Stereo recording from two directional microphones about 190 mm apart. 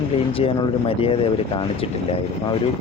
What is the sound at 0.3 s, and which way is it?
Speech, 30° left (ahead or behind).